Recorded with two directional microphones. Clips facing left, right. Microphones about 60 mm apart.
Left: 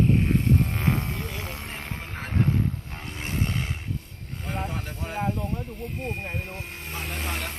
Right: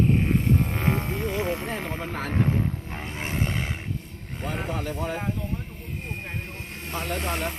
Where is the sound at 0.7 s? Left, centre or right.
Centre.